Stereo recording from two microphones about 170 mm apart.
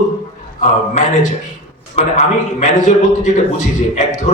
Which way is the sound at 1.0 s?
40° left (ahead or behind).